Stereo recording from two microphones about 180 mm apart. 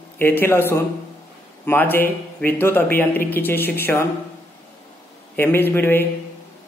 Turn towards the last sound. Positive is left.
turn(degrees=10)  # may be behind; listen again after turning